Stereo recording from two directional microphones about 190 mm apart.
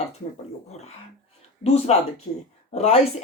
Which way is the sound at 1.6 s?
35° left (ahead or behind).